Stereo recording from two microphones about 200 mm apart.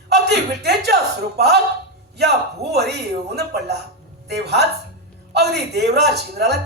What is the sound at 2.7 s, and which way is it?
A man's voice, 55° right (ahead or behind).